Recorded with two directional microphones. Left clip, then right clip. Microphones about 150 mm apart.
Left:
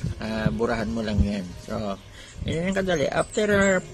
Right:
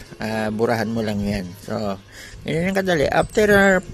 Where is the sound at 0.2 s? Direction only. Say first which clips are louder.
Right 5 dB; 40° right (ahead or behind).